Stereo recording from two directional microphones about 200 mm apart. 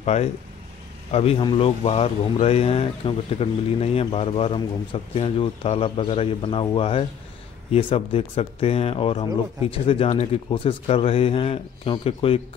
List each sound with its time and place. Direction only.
0.0 s a man's voice: 35° left (ahead or behind)